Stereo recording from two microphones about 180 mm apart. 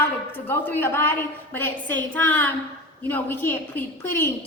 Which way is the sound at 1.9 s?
90° right.